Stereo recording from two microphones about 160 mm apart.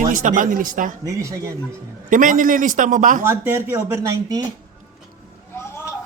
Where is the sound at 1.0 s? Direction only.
20° right (ahead or behind).